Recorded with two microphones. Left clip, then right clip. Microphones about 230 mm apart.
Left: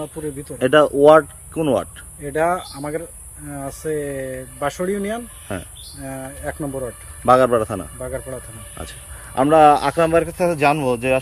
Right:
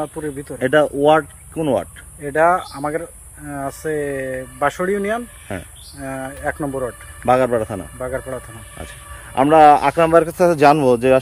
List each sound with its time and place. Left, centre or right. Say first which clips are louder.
0.4 s speech: left 1 dB; centre
10.2 s speech: right 5 dB; right